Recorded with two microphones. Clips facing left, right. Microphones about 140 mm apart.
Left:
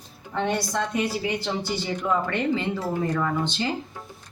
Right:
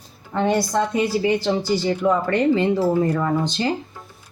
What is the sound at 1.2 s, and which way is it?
Speech, 40° right (ahead or behind).